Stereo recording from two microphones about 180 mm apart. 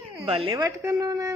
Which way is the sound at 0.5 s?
20° right (ahead or behind).